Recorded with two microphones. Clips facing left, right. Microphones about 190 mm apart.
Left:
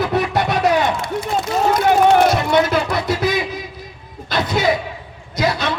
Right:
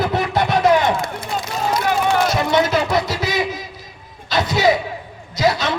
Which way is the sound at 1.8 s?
55° left (ahead or behind).